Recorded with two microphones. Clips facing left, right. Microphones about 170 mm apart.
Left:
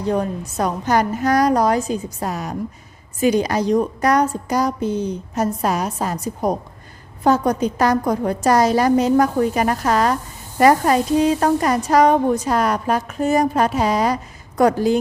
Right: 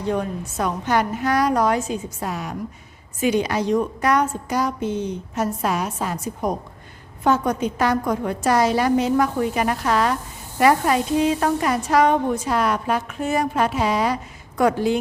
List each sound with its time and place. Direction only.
0.0 s a woman's voice: 35° left (ahead or behind)